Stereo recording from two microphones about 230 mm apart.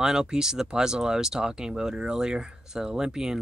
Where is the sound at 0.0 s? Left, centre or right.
Centre.